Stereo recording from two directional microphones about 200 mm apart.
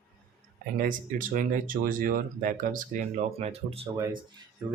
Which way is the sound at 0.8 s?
45° right (ahead or behind).